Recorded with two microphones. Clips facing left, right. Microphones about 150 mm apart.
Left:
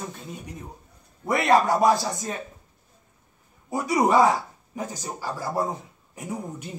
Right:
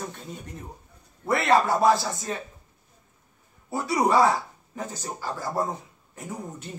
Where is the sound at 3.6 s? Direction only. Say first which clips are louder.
Left 2 dB; 15° left (ahead or behind).